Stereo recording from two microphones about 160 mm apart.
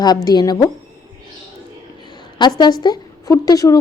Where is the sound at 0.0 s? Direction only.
25° left (ahead or behind).